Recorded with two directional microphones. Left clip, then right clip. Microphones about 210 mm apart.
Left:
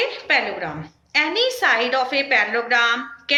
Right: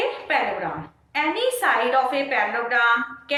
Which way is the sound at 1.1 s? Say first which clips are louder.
Left 3 dB; 50° left (ahead or behind).